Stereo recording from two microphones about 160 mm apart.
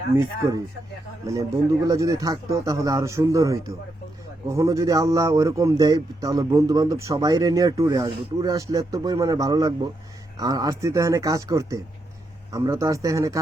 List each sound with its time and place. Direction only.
1.3 s a man's voice: 20° right (ahead or behind)